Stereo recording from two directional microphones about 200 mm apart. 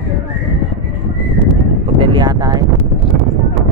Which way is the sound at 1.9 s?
25° right (ahead or behind).